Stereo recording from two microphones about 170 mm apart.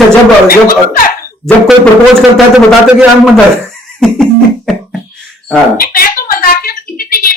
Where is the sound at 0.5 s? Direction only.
55° left (ahead or behind).